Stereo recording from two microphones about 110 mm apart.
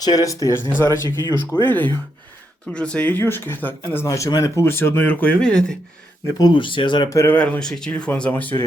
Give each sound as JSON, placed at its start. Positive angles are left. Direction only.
{"t": 0.0, "sound": "speech", "side_deg": 35}
{"t": 1.6, "sound": "speech", "side_deg": 15}
{"t": 3.8, "sound": "speech", "side_deg": 30}
{"t": 6.4, "sound": "speech", "side_deg": 45}
{"t": 7.1, "sound": "speech", "side_deg": 25}
{"t": 7.3, "sound": "speech", "side_deg": 10}